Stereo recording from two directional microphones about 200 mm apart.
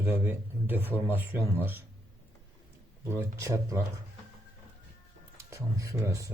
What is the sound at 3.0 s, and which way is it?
Speech, 15° right (ahead or behind).